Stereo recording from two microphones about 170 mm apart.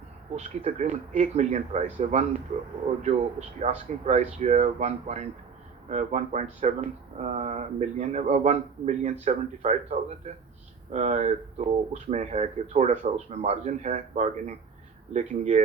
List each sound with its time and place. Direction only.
0.3 s speech: 45° right (ahead or behind)
3.6 s speech: 40° right (ahead or behind)